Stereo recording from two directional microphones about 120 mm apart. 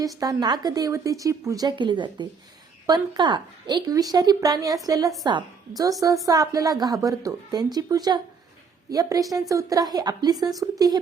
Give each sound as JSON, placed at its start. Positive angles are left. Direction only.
{"t": 0.0, "sound": "a woman's voice", "side_deg": -30}
{"t": 1.6, "sound": "a woman's voice", "side_deg": -40}